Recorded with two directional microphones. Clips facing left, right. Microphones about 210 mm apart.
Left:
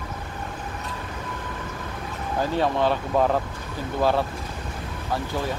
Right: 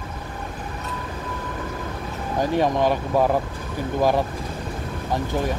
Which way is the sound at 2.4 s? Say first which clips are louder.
Right 3 dB; 15° right (ahead or behind).